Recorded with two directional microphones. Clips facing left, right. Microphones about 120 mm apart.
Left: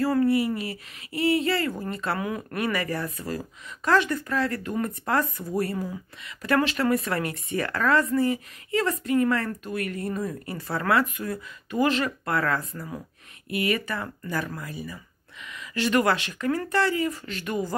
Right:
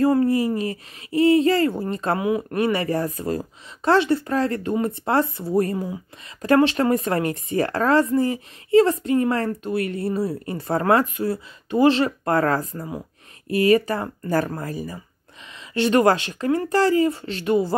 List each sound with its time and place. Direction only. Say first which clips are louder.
0.2 s speech: right 3 dB; 30° right (ahead or behind)
2.1 s speech: right 8 dB; 20° right (ahead or behind)
2.5 s speech: right 6 dB; 30° right (ahead or behind)
15.4 s speech: right 5 dB; 30° right (ahead or behind)